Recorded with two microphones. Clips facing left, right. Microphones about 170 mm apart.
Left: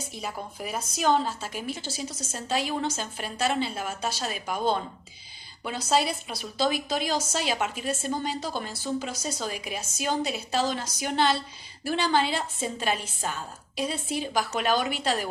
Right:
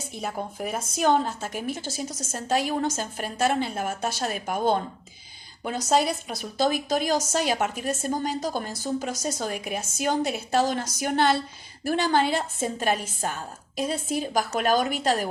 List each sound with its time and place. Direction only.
0.1 s speech: 50° right (ahead or behind)